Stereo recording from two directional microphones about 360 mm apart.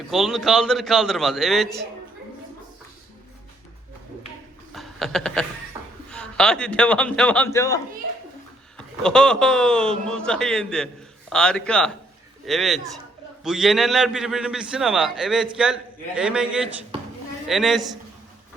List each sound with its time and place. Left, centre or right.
0.1 s a man's voice: centre
4.7 s chuckle: centre
5.7 s a sound: centre
6.1 s a man's voice: centre
9.0 s a man's voice: centre